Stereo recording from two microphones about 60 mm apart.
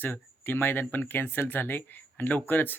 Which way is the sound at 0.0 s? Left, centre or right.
Left.